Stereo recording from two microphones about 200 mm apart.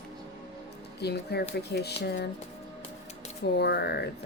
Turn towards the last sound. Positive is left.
turn(degrees=55)  # may be behind; listen again after turning